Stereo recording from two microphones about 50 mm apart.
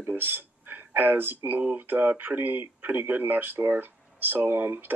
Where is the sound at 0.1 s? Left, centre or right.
Right.